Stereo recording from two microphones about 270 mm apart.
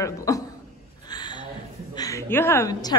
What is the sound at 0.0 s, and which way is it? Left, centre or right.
Speech, centre.